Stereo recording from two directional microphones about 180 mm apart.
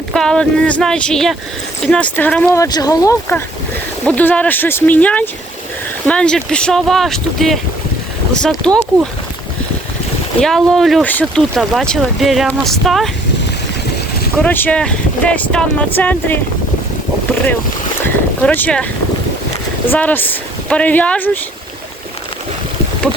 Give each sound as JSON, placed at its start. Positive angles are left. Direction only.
{"t": 0.1, "sound": "speech", "side_deg": 5}
{"t": 2.5, "sound": "speech", "side_deg": 20}
{"t": 10.4, "sound": "speech", "side_deg": 0}
{"t": 14.3, "sound": "speech", "side_deg": 10}
{"t": 18.0, "sound": "speech", "side_deg": 10}
{"t": 19.9, "sound": "speech", "side_deg": 10}